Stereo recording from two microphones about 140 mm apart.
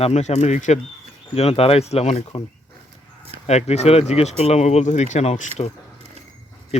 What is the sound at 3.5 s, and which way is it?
Speech, 50° left (ahead or behind).